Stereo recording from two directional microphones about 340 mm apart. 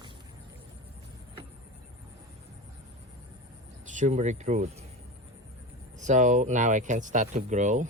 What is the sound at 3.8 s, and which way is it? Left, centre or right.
Speech, right.